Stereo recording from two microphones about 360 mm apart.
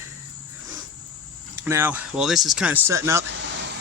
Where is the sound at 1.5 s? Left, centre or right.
Centre.